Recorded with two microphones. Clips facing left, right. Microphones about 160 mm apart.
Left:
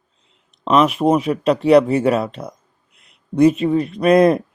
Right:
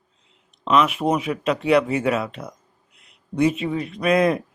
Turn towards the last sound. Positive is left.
turn(degrees=40)  # may be behind; listen again after turning